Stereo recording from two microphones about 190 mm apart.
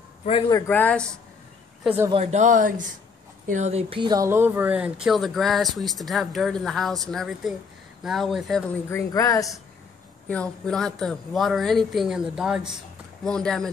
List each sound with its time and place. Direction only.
0.2 s a man's voice: 30° left (ahead or behind)
0.5 s speech: 15° left (ahead or behind)
1.8 s speech: 5° right (ahead or behind)
2.3 s speech: 40° right (ahead or behind); by 9.6 s 15° left (ahead or behind)
10.2 s speech: 5° left (ahead or behind)